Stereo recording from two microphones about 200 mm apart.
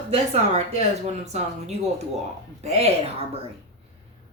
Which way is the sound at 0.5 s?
30° right (ahead or behind).